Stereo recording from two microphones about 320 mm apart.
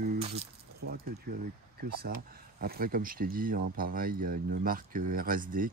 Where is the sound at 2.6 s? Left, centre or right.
Right.